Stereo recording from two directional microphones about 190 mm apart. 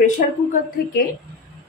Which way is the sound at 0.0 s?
45° left (ahead or behind).